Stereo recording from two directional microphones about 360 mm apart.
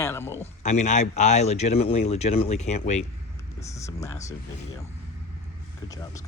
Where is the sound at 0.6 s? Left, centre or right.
Centre.